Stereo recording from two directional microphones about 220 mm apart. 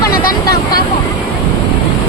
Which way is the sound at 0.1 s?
40° left (ahead or behind).